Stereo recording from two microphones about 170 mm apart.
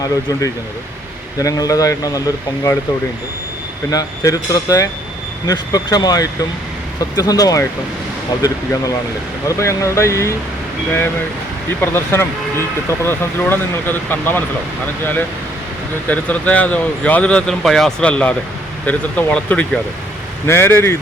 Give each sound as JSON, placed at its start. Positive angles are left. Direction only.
{"t": 1.4, "sound": "speech", "side_deg": 20}
{"t": 3.9, "sound": "speech", "side_deg": 20}
{"t": 11.8, "sound": "speech", "side_deg": 15}
{"t": 16.0, "sound": "speech", "side_deg": 10}